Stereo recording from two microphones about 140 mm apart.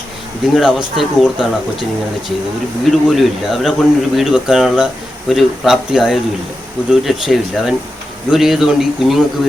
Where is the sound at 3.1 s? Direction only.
Centre (ahead or behind).